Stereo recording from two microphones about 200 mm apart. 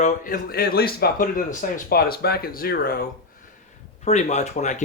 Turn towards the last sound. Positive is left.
turn(degrees=35)  # may be behind; listen again after turning